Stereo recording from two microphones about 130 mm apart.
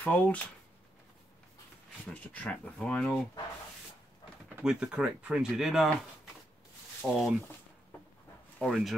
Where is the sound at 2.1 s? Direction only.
10° left (ahead or behind).